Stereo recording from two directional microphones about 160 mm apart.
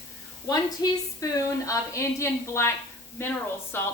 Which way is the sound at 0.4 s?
20° left (ahead or behind).